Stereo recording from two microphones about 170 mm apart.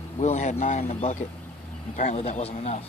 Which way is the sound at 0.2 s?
45° left (ahead or behind).